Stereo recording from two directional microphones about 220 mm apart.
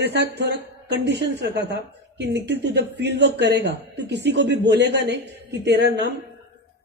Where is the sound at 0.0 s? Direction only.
50° right (ahead or behind).